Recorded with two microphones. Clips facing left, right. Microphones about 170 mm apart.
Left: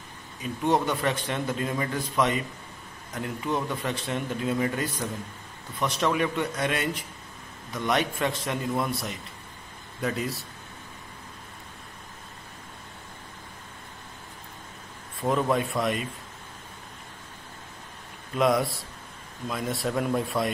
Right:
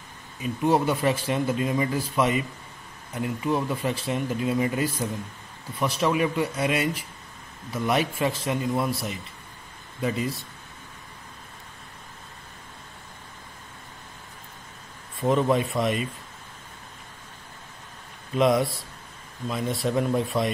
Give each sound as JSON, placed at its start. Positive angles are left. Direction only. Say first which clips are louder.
{"t": 0.4, "sound": "a man's voice", "louder": "right 2 dB", "side_deg": -5}
{"t": 15.2, "sound": "a man's voice", "louder": "right 3 dB", "side_deg": 0}
{"t": 18.3, "sound": "a man's voice", "louder": "right 2 dB", "side_deg": 0}